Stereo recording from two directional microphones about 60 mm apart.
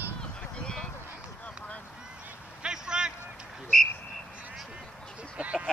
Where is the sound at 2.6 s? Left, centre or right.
Centre.